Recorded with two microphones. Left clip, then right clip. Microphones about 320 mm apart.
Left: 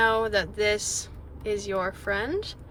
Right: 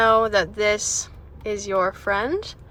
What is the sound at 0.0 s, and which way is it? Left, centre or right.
Speech, centre.